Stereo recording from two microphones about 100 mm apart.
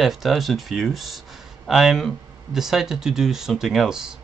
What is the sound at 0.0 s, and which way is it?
Speech, centre (ahead or behind).